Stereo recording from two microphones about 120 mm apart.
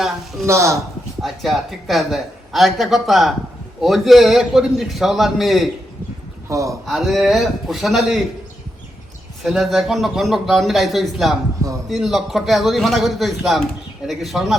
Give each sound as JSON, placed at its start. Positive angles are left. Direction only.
{"t": 0.4, "sound": "speech", "side_deg": -25}
{"t": 1.2, "sound": "a woman's voice", "side_deg": 0}
{"t": 6.5, "sound": "speech", "side_deg": -25}
{"t": 6.8, "sound": "a woman's voice", "side_deg": 0}
{"t": 9.4, "sound": "a woman's voice", "side_deg": 0}